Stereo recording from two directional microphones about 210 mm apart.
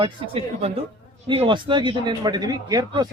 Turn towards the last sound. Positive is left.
turn(degrees=-20)  # may be behind; listen again after turning